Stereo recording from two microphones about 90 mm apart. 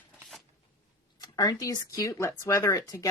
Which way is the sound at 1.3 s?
45° left (ahead or behind).